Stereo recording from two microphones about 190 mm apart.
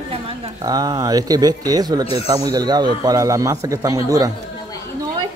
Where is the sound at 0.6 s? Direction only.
20° right (ahead or behind).